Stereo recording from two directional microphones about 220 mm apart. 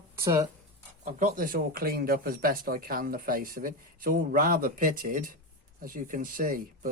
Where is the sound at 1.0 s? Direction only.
40° right (ahead or behind).